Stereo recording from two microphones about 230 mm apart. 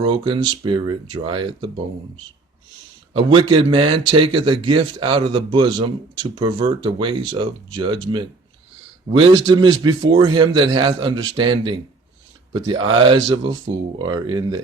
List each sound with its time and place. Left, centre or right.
0.0 s a man's voice: right
3.1 s a man's voice: right